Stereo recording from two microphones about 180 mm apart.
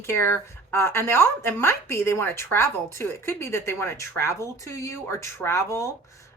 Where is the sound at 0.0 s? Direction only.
15° left (ahead or behind).